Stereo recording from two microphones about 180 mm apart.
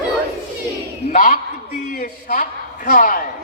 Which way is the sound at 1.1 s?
50° left (ahead or behind).